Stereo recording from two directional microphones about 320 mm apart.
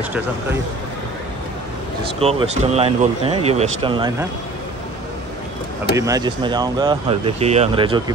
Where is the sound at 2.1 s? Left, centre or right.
Centre.